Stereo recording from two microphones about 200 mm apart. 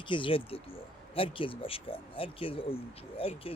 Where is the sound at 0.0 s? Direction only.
25° left (ahead or behind).